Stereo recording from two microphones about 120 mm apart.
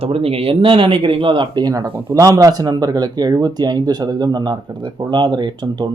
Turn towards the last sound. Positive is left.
turn(degrees=-35)  # may be behind; listen again after turning